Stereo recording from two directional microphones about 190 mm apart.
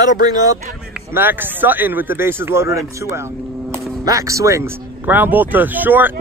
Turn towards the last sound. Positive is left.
turn(degrees=-10)  # may be behind; listen again after turning